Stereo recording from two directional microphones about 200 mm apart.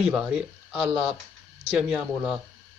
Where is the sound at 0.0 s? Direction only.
5° right (ahead or behind).